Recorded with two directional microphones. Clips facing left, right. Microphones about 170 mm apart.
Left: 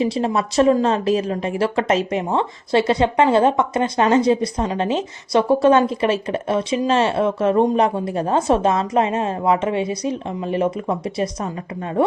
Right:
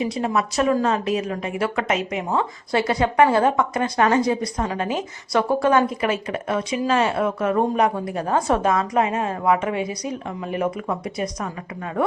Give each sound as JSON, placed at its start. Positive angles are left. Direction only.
{"t": 0.0, "sound": "speech", "side_deg": 30}